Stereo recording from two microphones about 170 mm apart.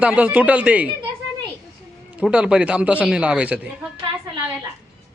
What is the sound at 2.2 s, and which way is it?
A man's voice, 5° right (ahead or behind).